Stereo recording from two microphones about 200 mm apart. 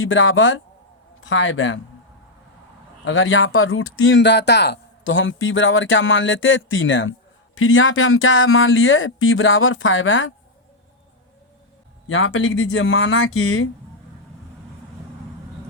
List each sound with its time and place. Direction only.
0.0 s speech: 75° left (ahead or behind)
3.0 s speech: 75° left (ahead or behind)
12.0 s speech: 75° left (ahead or behind)